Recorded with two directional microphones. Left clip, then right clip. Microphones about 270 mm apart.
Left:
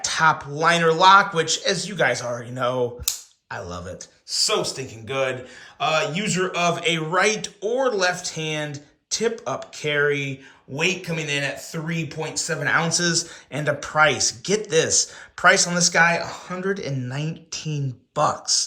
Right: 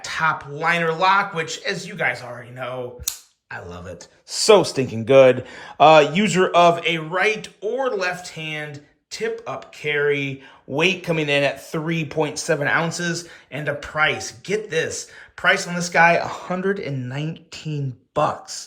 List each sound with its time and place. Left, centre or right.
0.0 s speech: centre
4.3 s speech: centre